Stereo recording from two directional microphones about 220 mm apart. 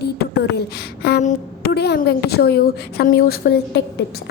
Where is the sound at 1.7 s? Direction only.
50° left (ahead or behind).